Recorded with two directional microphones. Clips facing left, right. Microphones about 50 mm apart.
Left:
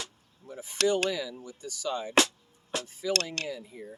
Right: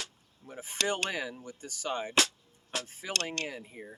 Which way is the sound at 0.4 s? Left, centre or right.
Right.